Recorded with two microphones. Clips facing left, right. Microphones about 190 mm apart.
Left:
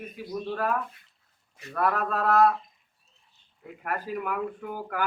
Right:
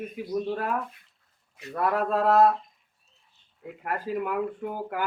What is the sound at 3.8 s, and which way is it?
Speech, 25° right (ahead or behind).